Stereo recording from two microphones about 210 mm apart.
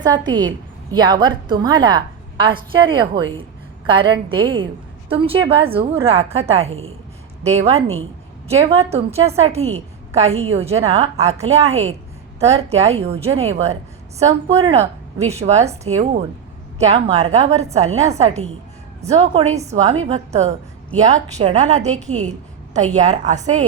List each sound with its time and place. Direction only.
0.3 s a woman's voice: 20° right (ahead or behind)
6.7 s a woman's voice: 75° right (ahead or behind)
7.4 s a woman's voice: 30° right (ahead or behind)